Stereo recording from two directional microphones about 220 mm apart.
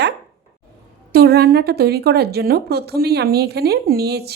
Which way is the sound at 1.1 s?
45° right (ahead or behind).